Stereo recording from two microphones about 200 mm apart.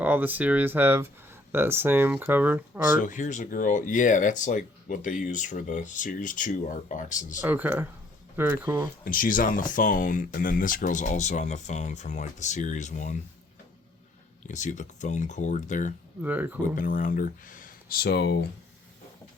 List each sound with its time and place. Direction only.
0.0 s speech: 10° right (ahead or behind)
3.0 s speech: 40° left (ahead or behind)
7.4 s speech: 10° right (ahead or behind)
9.0 s speech: 45° left (ahead or behind)
14.4 s speech: 35° left (ahead or behind)
16.2 s speech: 10° right (ahead or behind)
16.7 s speech: 40° left (ahead or behind)